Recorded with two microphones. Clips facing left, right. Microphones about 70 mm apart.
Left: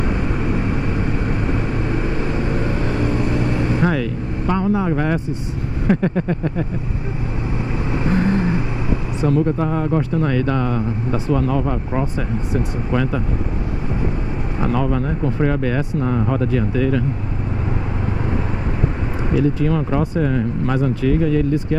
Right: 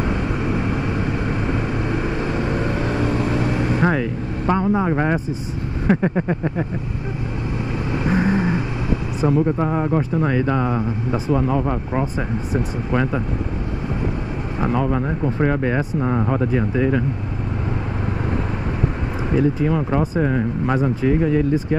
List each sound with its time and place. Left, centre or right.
2.4 s vehicle: centre
3.8 s vehicle: right
5.9 s speech: centre
8.0 s vehicle: centre
9.2 s speech: centre
14.6 s speech: centre
19.6 s speech: centre